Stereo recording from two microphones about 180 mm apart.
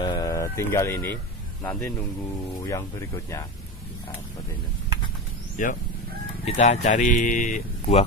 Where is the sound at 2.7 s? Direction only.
15° left (ahead or behind).